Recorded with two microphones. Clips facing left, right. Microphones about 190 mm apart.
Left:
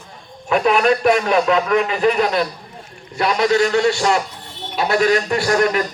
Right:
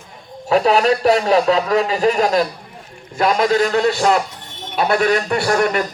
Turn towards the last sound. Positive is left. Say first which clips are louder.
# even
turn(degrees=-50)  # may be behind; listen again after turning